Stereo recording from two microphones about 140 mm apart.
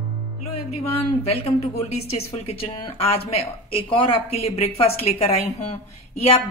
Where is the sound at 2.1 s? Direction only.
45° left (ahead or behind).